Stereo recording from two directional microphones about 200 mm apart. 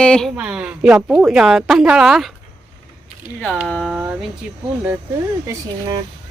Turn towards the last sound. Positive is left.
turn(degrees=-15)  # may be behind; listen again after turning